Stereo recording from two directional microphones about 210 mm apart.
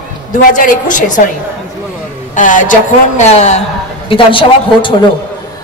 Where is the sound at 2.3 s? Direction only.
40° left (ahead or behind).